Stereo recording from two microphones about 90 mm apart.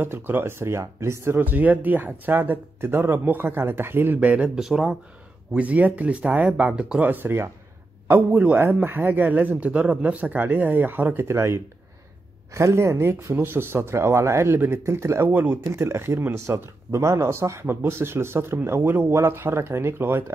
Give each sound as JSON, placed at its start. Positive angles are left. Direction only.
{"t": 0.0, "sound": "speech", "side_deg": -25}
{"t": 1.4, "sound": "speech", "side_deg": -20}
{"t": 5.5, "sound": "speech", "side_deg": -15}
{"t": 15.2, "sound": "speech", "side_deg": -20}